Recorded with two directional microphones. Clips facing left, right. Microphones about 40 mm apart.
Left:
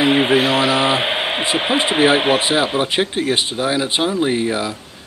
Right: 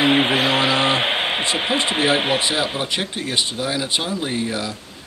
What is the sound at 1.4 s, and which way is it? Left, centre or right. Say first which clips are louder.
Speech: left 3 dB; centre.